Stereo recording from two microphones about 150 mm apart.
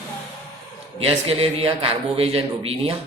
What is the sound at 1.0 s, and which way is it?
A man's voice, 40° right (ahead or behind).